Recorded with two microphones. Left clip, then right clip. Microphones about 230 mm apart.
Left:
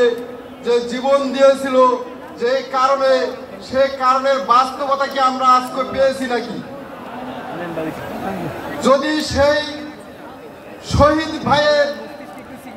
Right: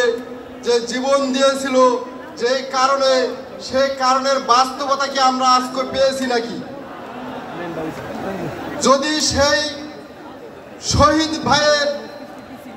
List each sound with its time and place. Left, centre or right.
0.7 s a man's voice: right
8.8 s a man's voice: right
10.9 s a man's voice: right